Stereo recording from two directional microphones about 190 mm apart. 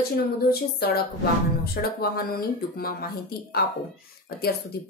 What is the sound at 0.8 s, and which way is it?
Speech, 55° left (ahead or behind).